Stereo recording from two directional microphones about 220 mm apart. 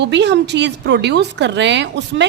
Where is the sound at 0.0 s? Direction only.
50° right (ahead or behind).